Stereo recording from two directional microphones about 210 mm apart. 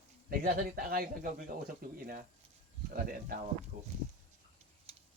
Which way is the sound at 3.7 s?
40° right (ahead or behind).